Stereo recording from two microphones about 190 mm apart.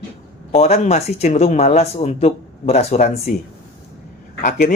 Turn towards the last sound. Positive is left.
turn(degrees=40)  # may be behind; listen again after turning